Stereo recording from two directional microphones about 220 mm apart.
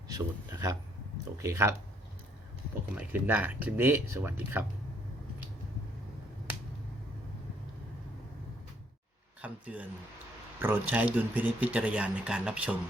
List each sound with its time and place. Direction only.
0.1 s speech: 15° right (ahead or behind)
3.0 s speech: 10° right (ahead or behind)
9.4 s speech: 5° right (ahead or behind)